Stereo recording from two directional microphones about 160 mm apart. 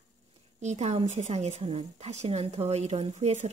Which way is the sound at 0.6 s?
45° right (ahead or behind).